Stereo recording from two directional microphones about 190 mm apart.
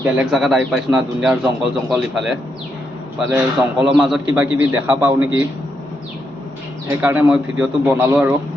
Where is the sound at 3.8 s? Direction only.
5° right (ahead or behind).